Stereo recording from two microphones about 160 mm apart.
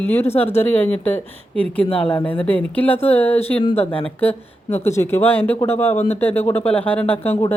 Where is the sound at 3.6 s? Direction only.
35° left (ahead or behind).